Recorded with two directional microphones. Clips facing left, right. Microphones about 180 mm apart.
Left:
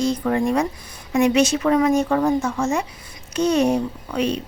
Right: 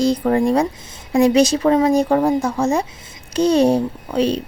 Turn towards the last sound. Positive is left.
turn(degrees=-35)  # may be behind; listen again after turning